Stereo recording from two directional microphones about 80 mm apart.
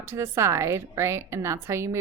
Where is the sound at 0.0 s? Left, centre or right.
Right.